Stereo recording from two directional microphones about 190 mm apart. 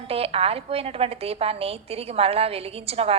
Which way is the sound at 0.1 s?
30° right (ahead or behind).